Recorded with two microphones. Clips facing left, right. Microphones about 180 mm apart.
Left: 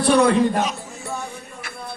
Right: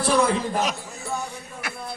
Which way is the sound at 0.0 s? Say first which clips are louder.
Left 5 dB; 65° left (ahead or behind).